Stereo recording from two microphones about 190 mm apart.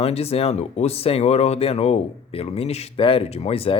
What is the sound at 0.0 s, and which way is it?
Speech, 30° left (ahead or behind).